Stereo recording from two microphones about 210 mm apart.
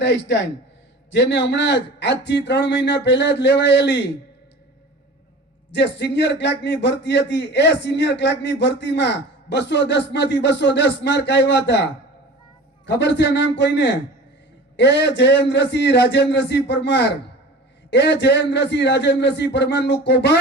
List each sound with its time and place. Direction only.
0.0 s a man's voice: 55° left (ahead or behind)
5.7 s a man's voice: 55° left (ahead or behind)